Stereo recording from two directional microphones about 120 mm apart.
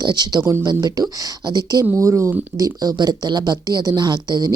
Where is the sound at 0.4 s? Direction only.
25° right (ahead or behind).